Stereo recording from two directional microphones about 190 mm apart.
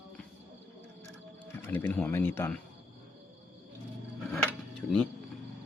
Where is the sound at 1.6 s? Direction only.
10° left (ahead or behind).